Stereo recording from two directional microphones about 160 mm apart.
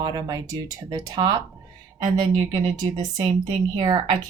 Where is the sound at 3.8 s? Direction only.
25° right (ahead or behind).